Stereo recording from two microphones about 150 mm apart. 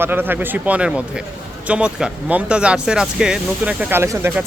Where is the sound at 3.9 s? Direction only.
15° right (ahead or behind).